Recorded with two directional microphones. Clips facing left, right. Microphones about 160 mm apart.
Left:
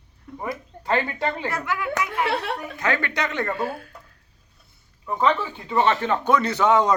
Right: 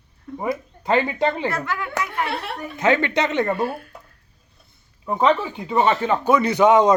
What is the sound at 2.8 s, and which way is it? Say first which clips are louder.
Speech: right 8 dB; 20° right (ahead or behind).